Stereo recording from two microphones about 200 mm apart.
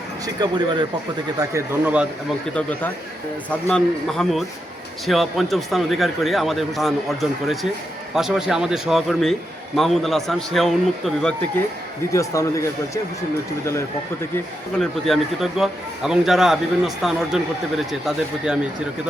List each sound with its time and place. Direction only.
0.3 s speech: 20° right (ahead or behind)
1.4 s speech: 10° right (ahead or behind)
2.6 s speech: 10° left (ahead or behind)
12.1 s speech: 15° left (ahead or behind)
14.8 s speech: centre (ahead or behind)